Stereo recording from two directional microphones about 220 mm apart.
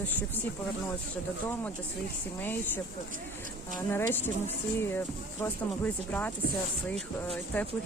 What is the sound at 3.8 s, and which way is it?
Speech, 10° left (ahead or behind).